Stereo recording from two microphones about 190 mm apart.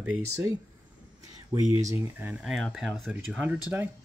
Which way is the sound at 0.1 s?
10° right (ahead or behind).